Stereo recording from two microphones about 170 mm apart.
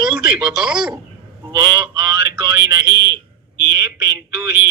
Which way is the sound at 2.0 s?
5° right (ahead or behind).